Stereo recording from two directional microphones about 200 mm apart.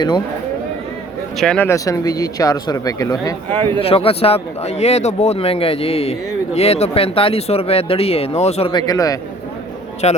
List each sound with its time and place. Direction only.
1.4 s speech: 5° left (ahead or behind)
3.8 s speech: 30° left (ahead or behind)
10.0 s a man's voice: 30° left (ahead or behind)